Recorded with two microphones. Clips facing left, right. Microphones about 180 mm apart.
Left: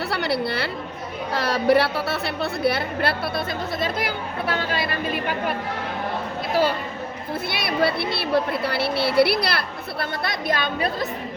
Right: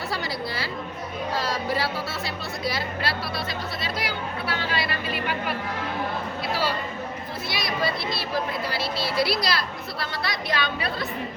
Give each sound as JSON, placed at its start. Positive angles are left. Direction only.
{"t": 0.1, "sound": "a woman's voice", "side_deg": 65}